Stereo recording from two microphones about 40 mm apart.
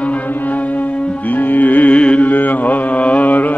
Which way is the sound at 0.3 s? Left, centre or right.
Left.